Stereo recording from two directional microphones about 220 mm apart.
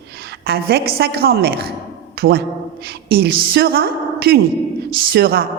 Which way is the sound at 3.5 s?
45° right (ahead or behind).